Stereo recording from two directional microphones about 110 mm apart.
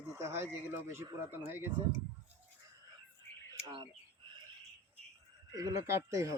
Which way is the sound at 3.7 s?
45° right (ahead or behind).